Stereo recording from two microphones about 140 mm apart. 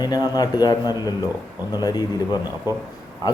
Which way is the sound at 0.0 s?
30° left (ahead or behind).